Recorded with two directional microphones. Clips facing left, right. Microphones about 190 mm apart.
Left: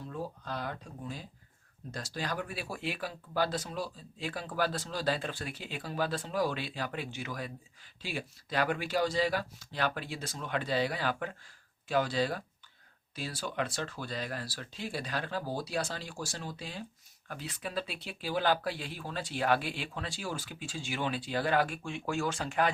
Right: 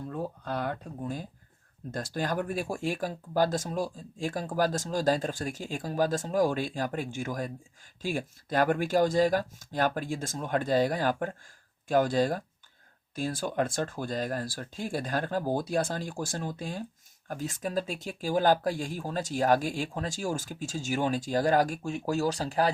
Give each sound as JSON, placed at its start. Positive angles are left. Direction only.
{"t": 0.1, "sound": "speech", "side_deg": -55}